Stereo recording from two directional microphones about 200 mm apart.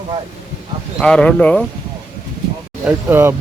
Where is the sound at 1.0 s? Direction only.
5° left (ahead or behind).